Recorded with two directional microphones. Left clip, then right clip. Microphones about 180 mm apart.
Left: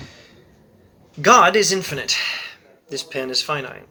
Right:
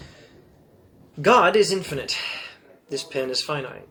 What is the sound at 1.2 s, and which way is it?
Speech, 20° left (ahead or behind).